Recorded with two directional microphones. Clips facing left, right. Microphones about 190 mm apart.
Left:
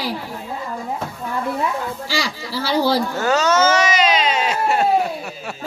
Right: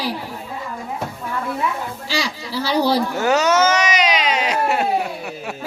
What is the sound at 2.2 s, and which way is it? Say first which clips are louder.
Speech: right 1 dB; 15° right (ahead or behind).